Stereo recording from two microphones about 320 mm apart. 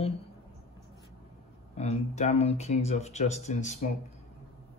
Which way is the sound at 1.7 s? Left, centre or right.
Centre.